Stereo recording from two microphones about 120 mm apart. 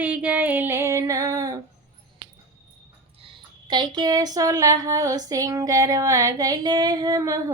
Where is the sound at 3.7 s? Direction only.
40° right (ahead or behind).